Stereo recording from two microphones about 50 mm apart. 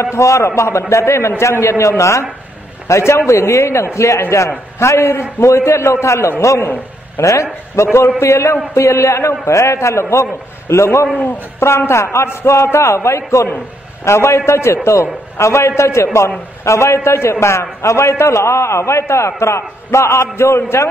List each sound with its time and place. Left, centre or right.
0.0 s a man's voice: left
0.6 s a man's voice: left
2.9 s a man's voice: left
3.3 s a man's voice: left
4.7 s a man's voice: left
11.6 s a man's voice: left
14.0 s a man's voice: left
16.6 s a man's voice: left